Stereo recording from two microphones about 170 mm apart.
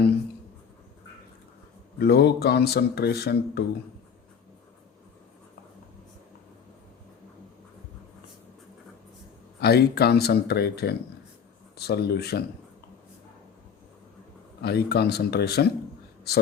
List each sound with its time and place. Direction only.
2.0 s speech: 70° left (ahead or behind)
9.6 s speech: 70° left (ahead or behind)
14.6 s speech: 70° left (ahead or behind)